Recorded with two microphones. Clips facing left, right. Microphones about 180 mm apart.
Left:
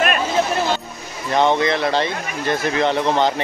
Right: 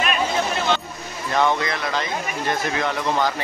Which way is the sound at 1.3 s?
20° left (ahead or behind).